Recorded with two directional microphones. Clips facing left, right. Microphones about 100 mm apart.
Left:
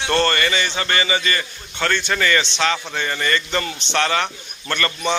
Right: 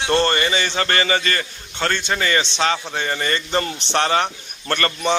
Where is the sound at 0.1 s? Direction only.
20° right (ahead or behind).